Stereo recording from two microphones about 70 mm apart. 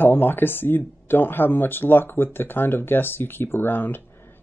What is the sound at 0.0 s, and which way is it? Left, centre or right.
Speech, left.